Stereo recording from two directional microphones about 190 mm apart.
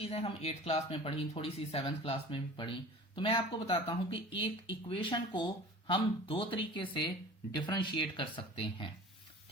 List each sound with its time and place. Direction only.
0.0 s speech: 30° left (ahead or behind)